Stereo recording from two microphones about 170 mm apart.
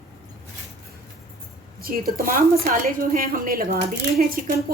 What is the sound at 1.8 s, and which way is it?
Speech, 60° right (ahead or behind).